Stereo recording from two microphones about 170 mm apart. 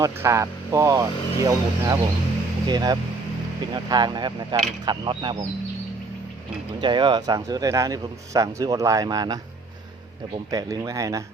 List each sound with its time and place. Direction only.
0.0 s a man's voice: 15° right (ahead or behind)
6.7 s a man's voice: 25° right (ahead or behind)
10.5 s a man's voice: 20° right (ahead or behind)